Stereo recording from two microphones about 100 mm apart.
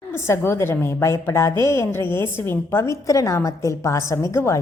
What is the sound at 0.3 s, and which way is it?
A woman's voice, 25° left (ahead or behind).